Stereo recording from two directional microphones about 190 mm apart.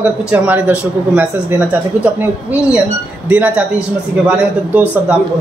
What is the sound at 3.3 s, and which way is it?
Speech, 5° right (ahead or behind).